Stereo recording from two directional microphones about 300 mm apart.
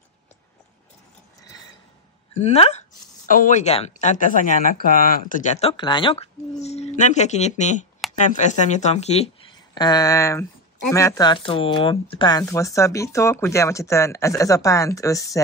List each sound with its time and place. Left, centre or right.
2.4 s speech: left